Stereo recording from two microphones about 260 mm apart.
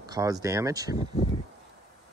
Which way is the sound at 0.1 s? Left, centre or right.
Centre.